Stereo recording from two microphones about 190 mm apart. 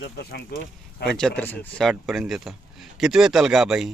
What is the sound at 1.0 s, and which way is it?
A man's voice, 5° left (ahead or behind).